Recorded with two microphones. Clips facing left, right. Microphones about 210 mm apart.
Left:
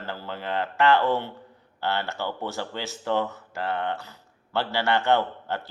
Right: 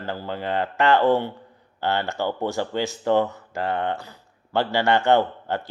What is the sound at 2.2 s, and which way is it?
Mantra, 45° right (ahead or behind).